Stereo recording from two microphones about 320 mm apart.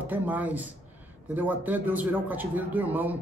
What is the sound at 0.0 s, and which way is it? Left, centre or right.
A man's voice, centre.